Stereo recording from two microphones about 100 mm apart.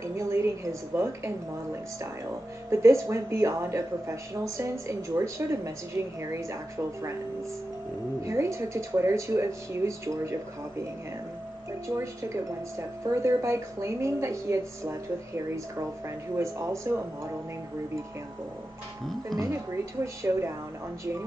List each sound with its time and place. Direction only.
0.0 s a sound: 30° right (ahead or behind)
2.7 s speech: 30° right (ahead or behind)
8.2 s speech: 30° right (ahead or behind)
11.9 s speech: 30° right (ahead or behind)
19.3 s speech: 30° right (ahead or behind)